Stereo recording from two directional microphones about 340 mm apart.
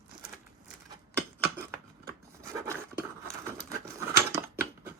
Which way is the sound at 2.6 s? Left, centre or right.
Centre.